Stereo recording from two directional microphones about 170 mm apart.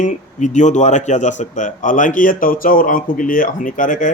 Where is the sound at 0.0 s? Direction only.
45° left (ahead or behind).